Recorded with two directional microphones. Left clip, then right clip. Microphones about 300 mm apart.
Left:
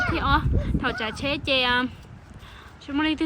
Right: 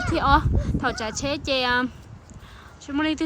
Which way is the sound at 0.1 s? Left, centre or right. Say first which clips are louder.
Right 3 dB; centre.